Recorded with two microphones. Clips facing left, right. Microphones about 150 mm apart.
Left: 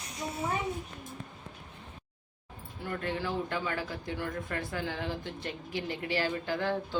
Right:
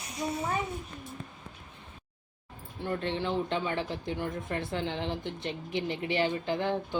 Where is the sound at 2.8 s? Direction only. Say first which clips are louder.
Right 3 dB; 25° right (ahead or behind).